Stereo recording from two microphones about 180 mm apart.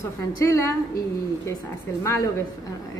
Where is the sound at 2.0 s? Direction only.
15° left (ahead or behind).